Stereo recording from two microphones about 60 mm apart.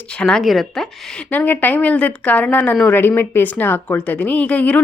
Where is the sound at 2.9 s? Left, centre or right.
Left.